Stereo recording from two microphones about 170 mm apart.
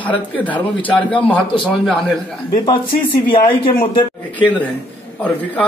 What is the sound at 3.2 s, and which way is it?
Speech, 30° left (ahead or behind).